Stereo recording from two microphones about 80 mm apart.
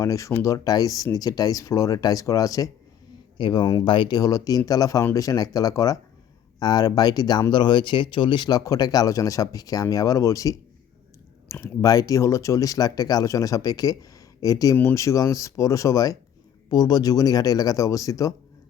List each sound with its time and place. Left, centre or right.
0.0 s speech: left
3.3 s speech: left
3.8 s speech: left
4.2 s speech: left
7.5 s speech: left
8.6 s speech: left
11.6 s speech: left
16.6 s speech: left